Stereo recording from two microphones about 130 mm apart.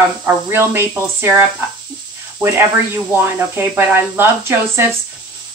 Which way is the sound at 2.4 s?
15° right (ahead or behind).